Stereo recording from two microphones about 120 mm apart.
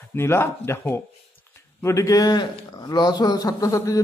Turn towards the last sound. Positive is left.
turn(degrees=25)  # may be behind; listen again after turning